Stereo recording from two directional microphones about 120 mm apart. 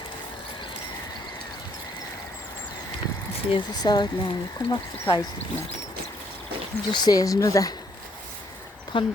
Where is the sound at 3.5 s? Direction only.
40° left (ahead or behind).